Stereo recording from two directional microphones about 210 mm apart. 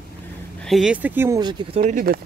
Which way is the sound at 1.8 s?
45° right (ahead or behind).